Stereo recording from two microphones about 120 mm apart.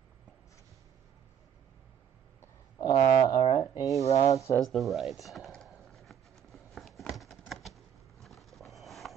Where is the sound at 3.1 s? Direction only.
35° left (ahead or behind).